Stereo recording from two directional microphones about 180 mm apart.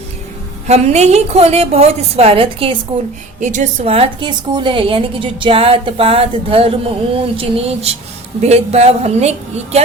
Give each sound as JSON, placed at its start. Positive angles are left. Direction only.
{"t": 0.7, "sound": "a woman's voice", "side_deg": -40}
{"t": 3.4, "sound": "a woman's voice", "side_deg": -45}